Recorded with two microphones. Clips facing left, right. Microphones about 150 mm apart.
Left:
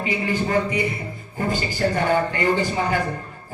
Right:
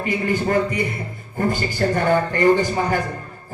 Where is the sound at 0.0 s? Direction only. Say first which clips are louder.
Right 2 dB; 50° right (ahead or behind).